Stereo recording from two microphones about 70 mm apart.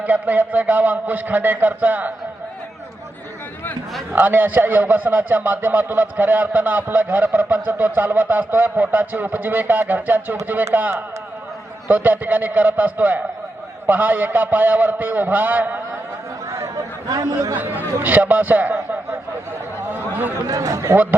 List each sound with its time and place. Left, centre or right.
0.0 s a man's voice: right
4.1 s a man's voice: right
11.9 s a man's voice: right
16.7 s speech: right
17.6 s a man's voice: right
19.9 s chatter: right
20.5 s a man's voice: right
20.9 s a man's voice: right